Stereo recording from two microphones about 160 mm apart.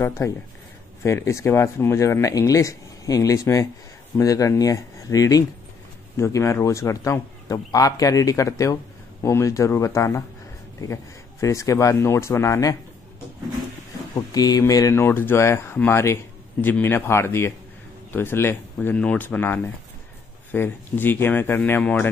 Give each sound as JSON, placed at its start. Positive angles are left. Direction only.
{"t": 0.0, "sound": "speech", "side_deg": 15}
{"t": 14.1, "sound": "speech", "side_deg": 25}